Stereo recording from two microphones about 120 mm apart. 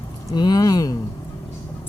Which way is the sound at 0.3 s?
35° left (ahead or behind).